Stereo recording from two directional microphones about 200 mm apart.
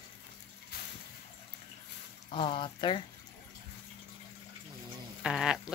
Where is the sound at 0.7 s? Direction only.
50° left (ahead or behind).